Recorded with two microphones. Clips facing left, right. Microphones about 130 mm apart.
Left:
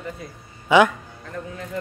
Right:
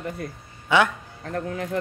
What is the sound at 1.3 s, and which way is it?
Speech, 80° right.